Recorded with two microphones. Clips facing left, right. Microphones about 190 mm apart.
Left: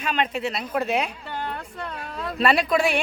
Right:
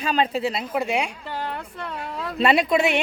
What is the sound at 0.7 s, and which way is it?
Speech, 15° right (ahead or behind).